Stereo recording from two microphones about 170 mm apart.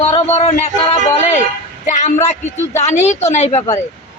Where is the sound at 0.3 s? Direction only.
40° left (ahead or behind).